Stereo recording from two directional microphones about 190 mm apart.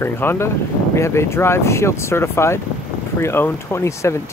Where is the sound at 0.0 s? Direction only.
10° left (ahead or behind).